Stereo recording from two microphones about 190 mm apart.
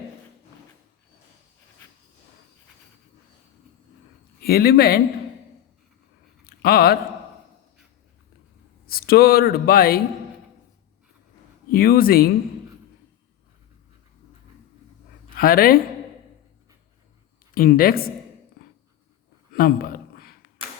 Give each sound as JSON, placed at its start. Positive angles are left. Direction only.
{"t": 4.4, "sound": "speech", "side_deg": 55}
{"t": 6.4, "sound": "a sound", "side_deg": 55}
{"t": 8.9, "sound": "speech", "side_deg": 50}
{"t": 11.7, "sound": "speech", "side_deg": 50}
{"t": 15.4, "sound": "speech", "side_deg": 50}
{"t": 17.5, "sound": "speech", "side_deg": 50}
{"t": 19.5, "sound": "a sound", "side_deg": 50}